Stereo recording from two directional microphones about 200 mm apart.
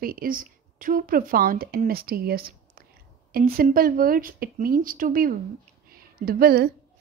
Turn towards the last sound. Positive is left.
turn(degrees=-50)  # may be behind; listen again after turning